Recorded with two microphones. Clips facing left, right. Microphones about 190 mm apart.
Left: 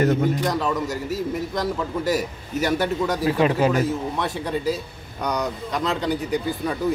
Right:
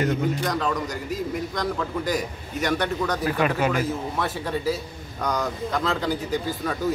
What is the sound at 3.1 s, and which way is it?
Speech, 25° left (ahead or behind).